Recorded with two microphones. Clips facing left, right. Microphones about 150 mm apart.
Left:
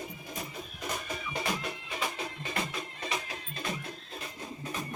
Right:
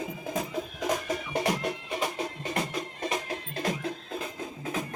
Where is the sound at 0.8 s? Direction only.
90° right; by 1.6 s 70° right (ahead or behind).